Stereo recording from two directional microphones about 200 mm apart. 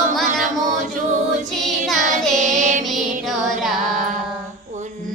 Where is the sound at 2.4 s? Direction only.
40° right (ahead or behind).